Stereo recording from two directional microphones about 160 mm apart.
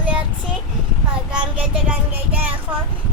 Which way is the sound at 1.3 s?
5° right (ahead or behind).